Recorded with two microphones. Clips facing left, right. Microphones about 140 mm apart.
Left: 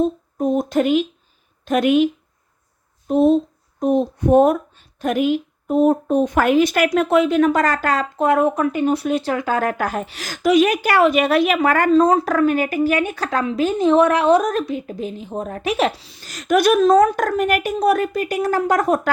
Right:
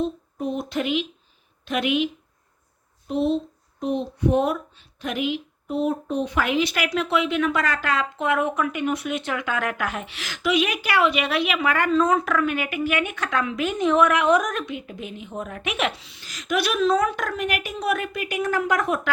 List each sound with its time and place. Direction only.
0.0 s a woman's voice: 45° left (ahead or behind)
3.1 s speech: 45° left (ahead or behind)